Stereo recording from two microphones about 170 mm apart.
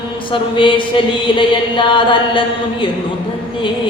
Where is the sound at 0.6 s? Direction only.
30° left (ahead or behind).